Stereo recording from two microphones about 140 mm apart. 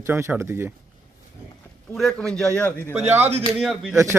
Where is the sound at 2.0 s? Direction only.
5° left (ahead or behind).